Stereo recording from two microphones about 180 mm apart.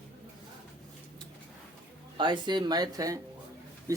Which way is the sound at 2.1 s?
25° right (ahead or behind).